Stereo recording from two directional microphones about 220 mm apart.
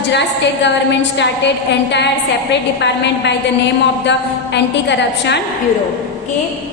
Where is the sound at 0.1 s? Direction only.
50° left (ahead or behind).